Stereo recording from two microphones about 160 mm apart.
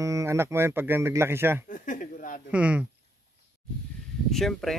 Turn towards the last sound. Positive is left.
turn(degrees=0)  # may be behind; listen again after turning